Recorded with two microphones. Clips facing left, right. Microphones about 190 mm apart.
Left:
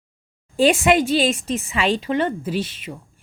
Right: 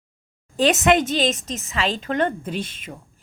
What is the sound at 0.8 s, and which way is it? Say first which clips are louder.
A woman's voice: left 1 dB; 10° left (ahead or behind).